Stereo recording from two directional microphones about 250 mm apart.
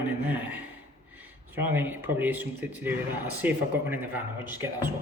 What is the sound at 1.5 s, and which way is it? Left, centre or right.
Speech, centre.